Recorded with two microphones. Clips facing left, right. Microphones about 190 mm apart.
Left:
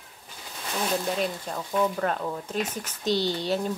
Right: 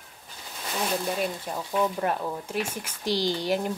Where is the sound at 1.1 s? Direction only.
5° right (ahead or behind).